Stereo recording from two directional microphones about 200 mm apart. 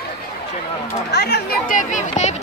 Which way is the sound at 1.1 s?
55° left (ahead or behind).